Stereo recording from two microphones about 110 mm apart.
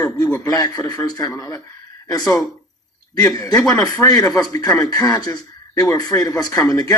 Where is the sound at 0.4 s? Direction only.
35° left (ahead or behind).